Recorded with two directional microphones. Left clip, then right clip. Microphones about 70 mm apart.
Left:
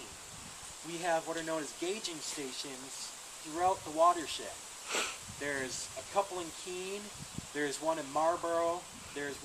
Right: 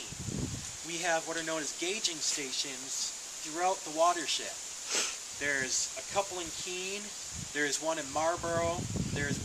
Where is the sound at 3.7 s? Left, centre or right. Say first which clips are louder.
Even; centre.